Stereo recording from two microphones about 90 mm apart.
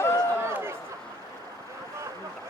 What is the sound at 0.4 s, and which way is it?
Chatter, 30° right (ahead or behind).